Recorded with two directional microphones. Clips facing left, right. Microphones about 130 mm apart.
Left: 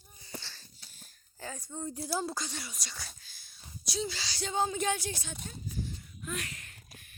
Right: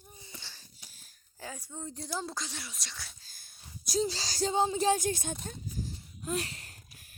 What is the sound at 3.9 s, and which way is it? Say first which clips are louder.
Speech: right 5 dB; 35° right (ahead or behind).